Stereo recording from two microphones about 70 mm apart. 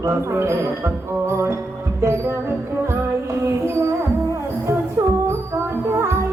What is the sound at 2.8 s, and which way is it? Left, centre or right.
Music, right.